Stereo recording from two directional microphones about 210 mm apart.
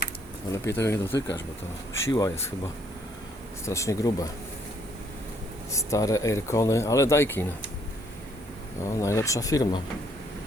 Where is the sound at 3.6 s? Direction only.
15° left (ahead or behind).